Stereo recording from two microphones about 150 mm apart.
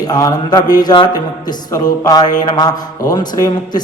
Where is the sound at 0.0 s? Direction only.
25° left (ahead or behind).